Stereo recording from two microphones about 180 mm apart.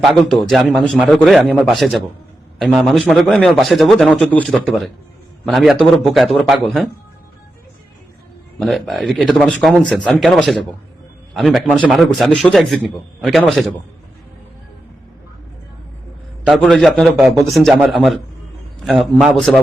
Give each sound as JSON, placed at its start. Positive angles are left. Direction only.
{"t": 0.0, "sound": "a man's voice", "side_deg": 0}
{"t": 8.5, "sound": "a man's voice", "side_deg": 0}
{"t": 16.6, "sound": "a man's voice", "side_deg": 0}